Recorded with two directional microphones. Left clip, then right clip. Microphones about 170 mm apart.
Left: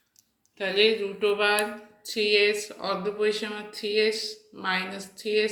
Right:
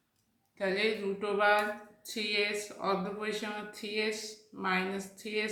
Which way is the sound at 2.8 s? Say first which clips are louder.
Left 7 dB; 15° left (ahead or behind).